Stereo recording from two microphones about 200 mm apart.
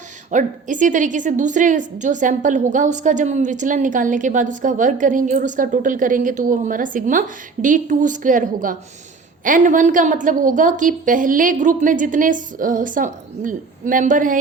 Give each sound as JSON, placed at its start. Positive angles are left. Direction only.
{"t": 0.3, "sound": "a woman's voice", "side_deg": -40}